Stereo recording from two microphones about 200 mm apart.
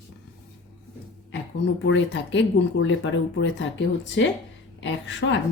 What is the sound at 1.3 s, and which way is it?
Speech, 65° left (ahead or behind).